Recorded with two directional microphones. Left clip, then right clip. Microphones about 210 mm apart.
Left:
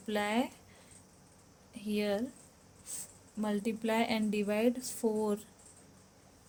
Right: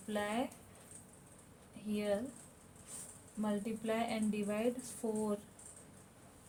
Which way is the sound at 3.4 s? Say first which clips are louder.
Left 4 dB; 55° left (ahead or behind).